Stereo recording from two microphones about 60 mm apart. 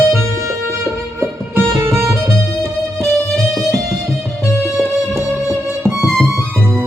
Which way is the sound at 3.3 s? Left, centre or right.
Centre.